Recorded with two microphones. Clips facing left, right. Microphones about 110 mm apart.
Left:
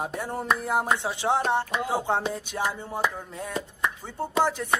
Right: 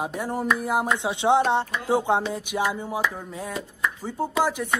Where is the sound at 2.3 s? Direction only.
10° right (ahead or behind).